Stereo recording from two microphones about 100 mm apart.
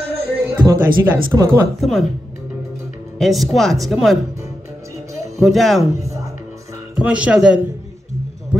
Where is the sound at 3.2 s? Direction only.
Centre (ahead or behind).